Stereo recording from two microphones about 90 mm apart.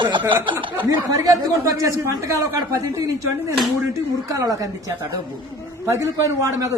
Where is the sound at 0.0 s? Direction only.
60° right (ahead or behind).